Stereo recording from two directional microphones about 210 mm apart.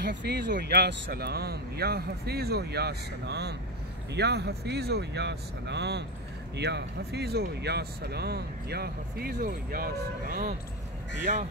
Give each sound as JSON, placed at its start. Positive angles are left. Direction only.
{"t": 0.0, "sound": "speech", "side_deg": -55}